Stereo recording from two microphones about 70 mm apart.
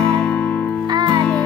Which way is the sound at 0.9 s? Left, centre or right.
Right.